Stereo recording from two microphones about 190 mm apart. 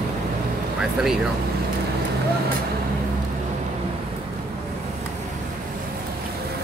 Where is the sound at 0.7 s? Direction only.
5° right (ahead or behind).